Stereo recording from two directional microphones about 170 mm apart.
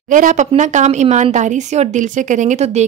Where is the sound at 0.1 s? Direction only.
50° right (ahead or behind).